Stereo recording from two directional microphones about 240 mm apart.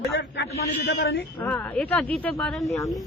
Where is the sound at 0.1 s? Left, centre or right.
Left.